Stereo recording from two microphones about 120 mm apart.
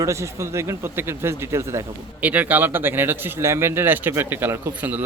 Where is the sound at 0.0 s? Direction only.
25° right (ahead or behind).